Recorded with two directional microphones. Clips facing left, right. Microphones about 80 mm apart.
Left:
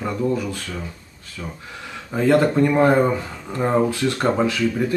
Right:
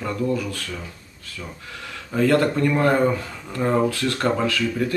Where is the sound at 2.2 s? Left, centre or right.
Left.